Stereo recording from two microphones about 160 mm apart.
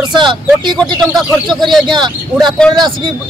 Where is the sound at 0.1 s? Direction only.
30° right (ahead or behind).